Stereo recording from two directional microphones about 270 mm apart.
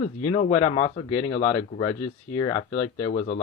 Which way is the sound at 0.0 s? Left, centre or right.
Left.